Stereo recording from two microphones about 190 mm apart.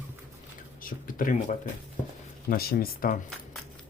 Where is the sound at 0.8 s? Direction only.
45° left (ahead or behind).